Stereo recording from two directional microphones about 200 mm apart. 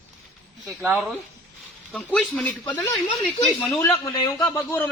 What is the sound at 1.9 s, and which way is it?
Speech, 5° left (ahead or behind).